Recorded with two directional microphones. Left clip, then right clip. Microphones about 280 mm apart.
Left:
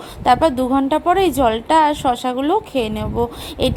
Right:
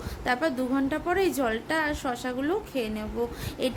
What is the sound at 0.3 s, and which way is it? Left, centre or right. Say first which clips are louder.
Speech: left 12 dB; centre.